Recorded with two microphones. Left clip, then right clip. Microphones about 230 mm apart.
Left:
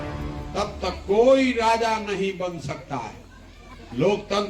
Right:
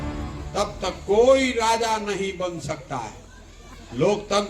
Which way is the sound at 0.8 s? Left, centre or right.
Right.